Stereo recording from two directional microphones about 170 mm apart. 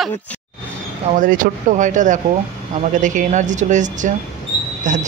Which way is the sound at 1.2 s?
55° right (ahead or behind).